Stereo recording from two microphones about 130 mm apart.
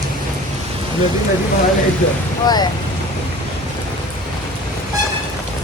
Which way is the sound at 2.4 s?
30° left (ahead or behind).